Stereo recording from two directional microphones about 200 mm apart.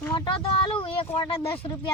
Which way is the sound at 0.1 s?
25° left (ahead or behind).